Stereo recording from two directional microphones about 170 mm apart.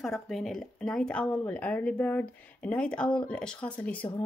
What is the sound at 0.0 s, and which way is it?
A woman's voice, centre (ahead or behind).